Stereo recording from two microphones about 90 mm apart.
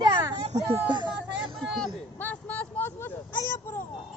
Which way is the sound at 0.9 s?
60° right (ahead or behind).